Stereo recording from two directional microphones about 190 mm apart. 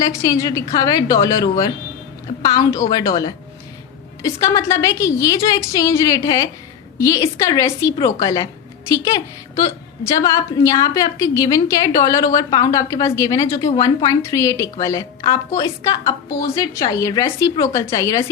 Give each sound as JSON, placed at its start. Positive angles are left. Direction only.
{"t": 0.0, "sound": "a woman's voice", "side_deg": 15}